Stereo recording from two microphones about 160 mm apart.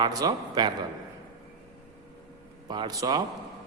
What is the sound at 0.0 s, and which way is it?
Speech, 25° right (ahead or behind).